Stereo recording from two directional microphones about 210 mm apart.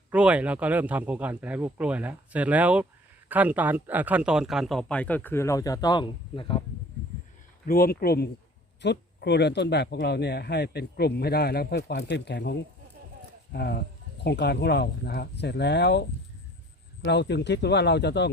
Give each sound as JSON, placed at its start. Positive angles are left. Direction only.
{"t": 0.1, "sound": "a man's voice", "side_deg": -5}
{"t": 7.7, "sound": "speech", "side_deg": 45}